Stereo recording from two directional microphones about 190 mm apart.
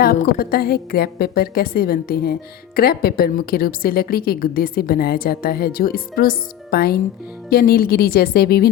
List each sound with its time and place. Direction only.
0.0 s a woman's voice: 50° left (ahead or behind)